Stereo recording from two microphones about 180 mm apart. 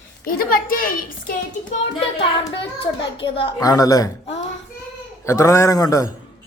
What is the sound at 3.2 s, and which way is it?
Speech, 30° left (ahead or behind).